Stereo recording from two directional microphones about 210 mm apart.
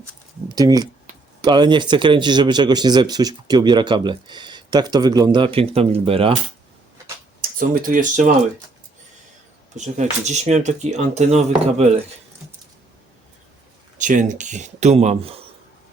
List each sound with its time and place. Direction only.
0.4 s speech: 15° right (ahead or behind)
7.7 s speech: 40° right (ahead or behind)
9.7 s speech: 35° right (ahead or behind)
14.0 s speech: 35° right (ahead or behind)